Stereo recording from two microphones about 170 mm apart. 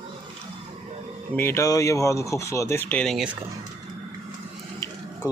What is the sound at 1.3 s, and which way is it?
Speech, 15° left (ahead or behind).